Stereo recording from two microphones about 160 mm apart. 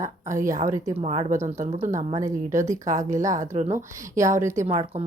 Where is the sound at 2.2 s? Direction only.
20° right (ahead or behind).